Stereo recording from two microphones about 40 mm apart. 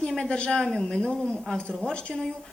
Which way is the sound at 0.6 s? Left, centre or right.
Centre.